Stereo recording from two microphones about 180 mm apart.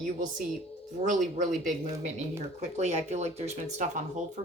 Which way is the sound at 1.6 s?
40° right (ahead or behind).